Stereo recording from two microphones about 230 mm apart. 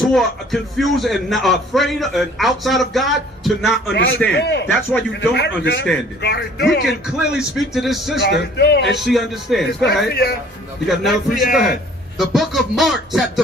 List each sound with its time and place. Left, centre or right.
0.1 s a man's voice: centre
4.4 s a man's voice: left
4.7 s a man's voice: centre
5.3 s a man's voice: left
6.8 s a man's voice: centre
8.2 s a man's voice: left
9.0 s a man's voice: centre
10.1 s a man's voice: left
10.8 s a man's voice: centre